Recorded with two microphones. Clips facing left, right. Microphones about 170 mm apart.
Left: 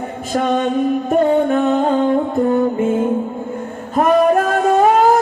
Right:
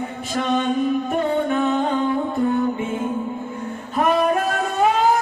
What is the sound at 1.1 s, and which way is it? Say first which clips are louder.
Music: left 7 dB; 45° left (ahead or behind).